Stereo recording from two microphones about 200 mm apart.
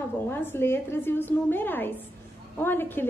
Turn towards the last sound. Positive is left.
turn(degrees=10)  # may be behind; listen again after turning